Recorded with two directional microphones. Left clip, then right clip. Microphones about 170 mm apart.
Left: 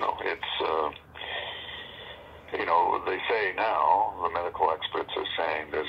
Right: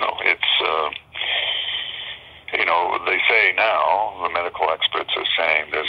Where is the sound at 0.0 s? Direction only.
30° right (ahead or behind).